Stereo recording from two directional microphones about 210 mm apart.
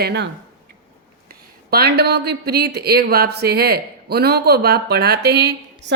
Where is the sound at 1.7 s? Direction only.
50° right (ahead or behind).